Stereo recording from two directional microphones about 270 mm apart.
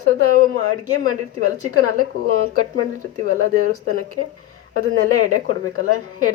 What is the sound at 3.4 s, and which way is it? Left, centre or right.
A woman's voice, right.